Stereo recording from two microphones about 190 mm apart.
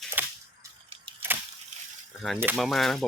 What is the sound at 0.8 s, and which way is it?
Camera, 30° right (ahead or behind).